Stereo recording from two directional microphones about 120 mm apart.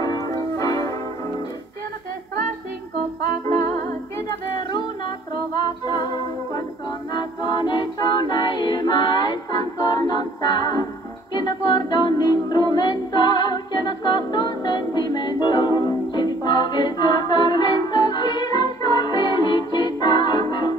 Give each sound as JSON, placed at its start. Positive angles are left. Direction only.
{"t": 0.0, "sound": "music", "side_deg": 30}
{"t": 4.7, "sound": "humming", "side_deg": 45}
{"t": 7.2, "sound": "a capella", "side_deg": 40}
{"t": 11.3, "sound": "music", "side_deg": 40}